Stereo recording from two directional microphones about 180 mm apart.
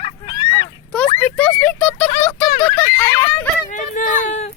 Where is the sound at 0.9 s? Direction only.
5° left (ahead or behind).